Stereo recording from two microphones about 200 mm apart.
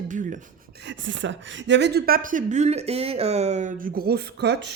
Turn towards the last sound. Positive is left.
turn(degrees=-55)  # may be behind; listen again after turning